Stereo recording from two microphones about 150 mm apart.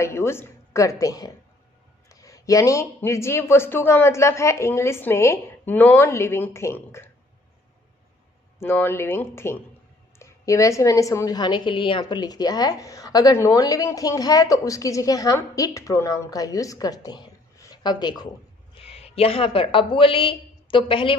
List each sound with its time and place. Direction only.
0.0 s a woman's voice: 15° left (ahead or behind)
8.5 s a woman's voice: 15° left (ahead or behind)
18.8 s a woman's voice: 40° left (ahead or behind)